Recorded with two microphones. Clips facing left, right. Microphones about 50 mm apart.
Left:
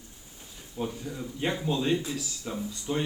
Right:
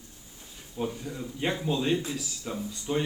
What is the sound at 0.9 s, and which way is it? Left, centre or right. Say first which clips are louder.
Speech: even; centre.